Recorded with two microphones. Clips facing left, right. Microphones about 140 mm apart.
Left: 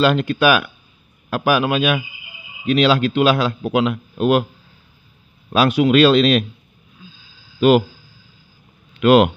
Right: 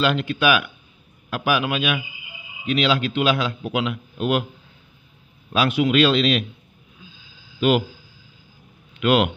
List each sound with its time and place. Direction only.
0.0 s a man's voice: 40° left (ahead or behind)
5.5 s a man's voice: 40° left (ahead or behind)
7.6 s a man's voice: 40° left (ahead or behind)
9.0 s a man's voice: 40° left (ahead or behind)